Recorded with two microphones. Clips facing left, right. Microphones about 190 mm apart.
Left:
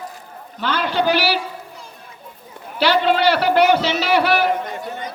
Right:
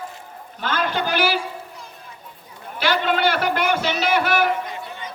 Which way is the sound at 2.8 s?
50° right (ahead or behind).